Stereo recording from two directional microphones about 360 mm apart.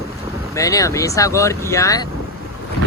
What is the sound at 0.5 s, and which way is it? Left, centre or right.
Speech, centre.